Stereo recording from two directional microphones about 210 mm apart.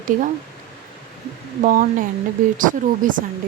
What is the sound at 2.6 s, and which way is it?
Speech, 40° right (ahead or behind).